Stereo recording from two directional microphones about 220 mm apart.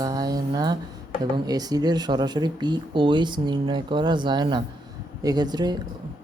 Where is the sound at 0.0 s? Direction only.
15° right (ahead or behind).